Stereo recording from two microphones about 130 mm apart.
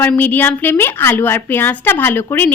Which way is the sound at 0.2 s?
15° left (ahead or behind).